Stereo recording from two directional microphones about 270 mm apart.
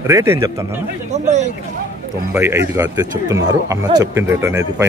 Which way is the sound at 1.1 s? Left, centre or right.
Right.